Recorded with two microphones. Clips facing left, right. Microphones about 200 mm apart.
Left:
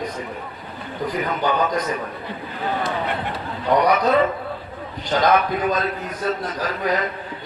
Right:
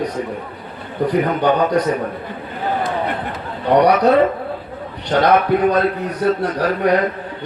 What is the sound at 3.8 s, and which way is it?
Speech, 70° right (ahead or behind).